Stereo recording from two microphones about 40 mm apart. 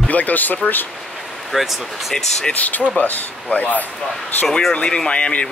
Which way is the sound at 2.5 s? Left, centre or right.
Left.